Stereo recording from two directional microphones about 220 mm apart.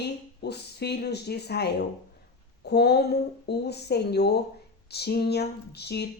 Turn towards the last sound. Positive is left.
turn(degrees=50)  # may be behind; listen again after turning